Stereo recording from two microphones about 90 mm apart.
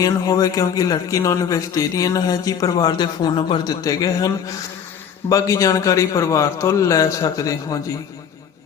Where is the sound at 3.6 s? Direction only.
45° left (ahead or behind).